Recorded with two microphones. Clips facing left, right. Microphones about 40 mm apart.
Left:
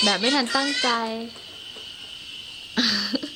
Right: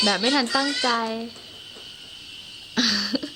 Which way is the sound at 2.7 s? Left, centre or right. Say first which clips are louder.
Even; centre.